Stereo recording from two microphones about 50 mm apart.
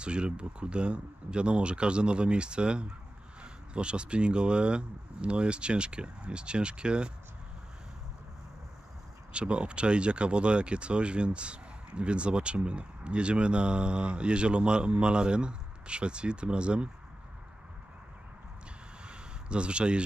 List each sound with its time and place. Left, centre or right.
0.0 s speech: right
9.3 s speech: right
19.0 s a sound: right